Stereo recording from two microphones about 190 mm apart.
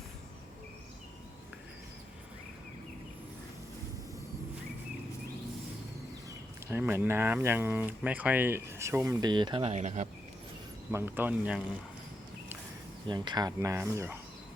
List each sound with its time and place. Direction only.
6.7 s speech: 10° right (ahead or behind); by 10.1 s 35° right (ahead or behind)
10.9 s speech: 10° right (ahead or behind)
13.1 s speech: 20° right (ahead or behind)